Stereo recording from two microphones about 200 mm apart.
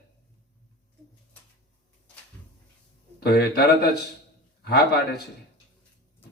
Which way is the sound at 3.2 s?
50° left (ahead or behind).